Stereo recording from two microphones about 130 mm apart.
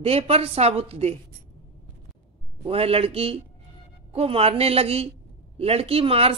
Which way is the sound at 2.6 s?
45° right (ahead or behind).